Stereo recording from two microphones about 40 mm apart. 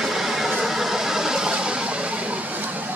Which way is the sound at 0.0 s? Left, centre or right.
Centre.